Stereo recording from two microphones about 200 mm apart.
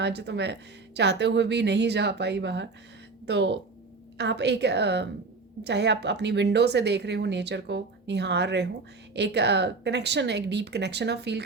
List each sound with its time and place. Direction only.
0.0 s a woman's voice: 55° right (ahead or behind)